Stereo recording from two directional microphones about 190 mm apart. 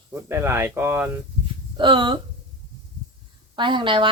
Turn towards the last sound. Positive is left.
turn(degrees=-25)  # may be behind; listen again after turning